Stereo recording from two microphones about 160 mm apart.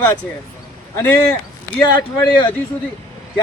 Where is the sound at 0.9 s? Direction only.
20° left (ahead or behind).